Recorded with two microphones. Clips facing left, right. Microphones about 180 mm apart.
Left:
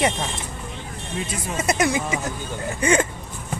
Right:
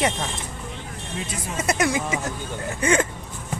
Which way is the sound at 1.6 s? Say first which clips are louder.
Left 1 dB; 20° left (ahead or behind).